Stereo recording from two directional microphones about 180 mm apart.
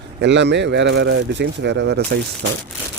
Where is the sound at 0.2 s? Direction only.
75° right (ahead or behind).